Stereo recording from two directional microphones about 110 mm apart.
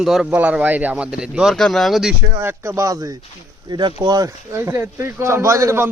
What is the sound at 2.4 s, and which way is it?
Speech, 20° right (ahead or behind).